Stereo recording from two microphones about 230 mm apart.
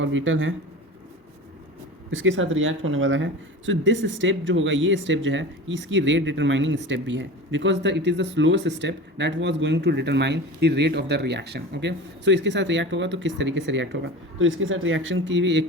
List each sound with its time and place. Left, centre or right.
0.0 s speech: right
2.0 s speech: right